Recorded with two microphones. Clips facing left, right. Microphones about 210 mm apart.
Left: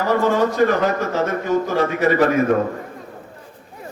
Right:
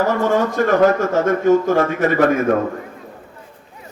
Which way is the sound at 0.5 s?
50° right (ahead or behind).